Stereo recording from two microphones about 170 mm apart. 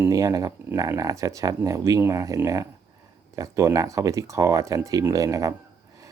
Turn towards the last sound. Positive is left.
turn(degrees=-20)  # may be behind; listen again after turning